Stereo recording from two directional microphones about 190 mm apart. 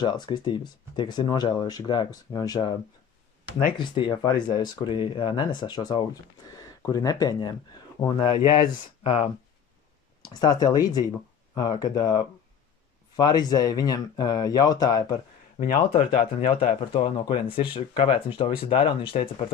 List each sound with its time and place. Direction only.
0.0 s speech: 25° left (ahead or behind)
15.6 s speech: 50° left (ahead or behind)
16.4 s speech: 30° left (ahead or behind)